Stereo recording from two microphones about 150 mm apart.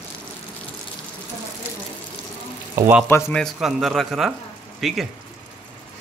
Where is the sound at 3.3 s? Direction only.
Centre (ahead or behind).